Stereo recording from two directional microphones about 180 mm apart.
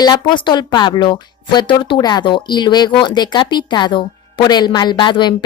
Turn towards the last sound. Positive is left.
turn(degrees=25)  # may be behind; listen again after turning